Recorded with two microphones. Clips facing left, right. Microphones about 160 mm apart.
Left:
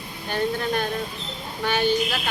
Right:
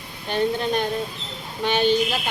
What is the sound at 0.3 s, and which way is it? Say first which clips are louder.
Speech: right 2 dB; 20° right (ahead or behind).